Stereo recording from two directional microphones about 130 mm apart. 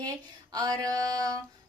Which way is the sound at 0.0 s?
30° right (ahead or behind).